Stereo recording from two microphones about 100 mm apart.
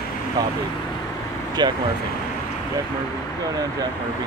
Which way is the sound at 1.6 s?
45° right (ahead or behind).